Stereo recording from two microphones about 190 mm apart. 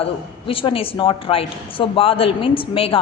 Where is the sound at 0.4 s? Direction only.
30° left (ahead or behind).